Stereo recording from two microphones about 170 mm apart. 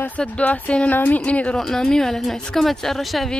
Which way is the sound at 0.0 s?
10° left (ahead or behind).